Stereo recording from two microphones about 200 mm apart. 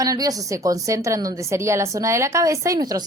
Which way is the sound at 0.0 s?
15° right (ahead or behind).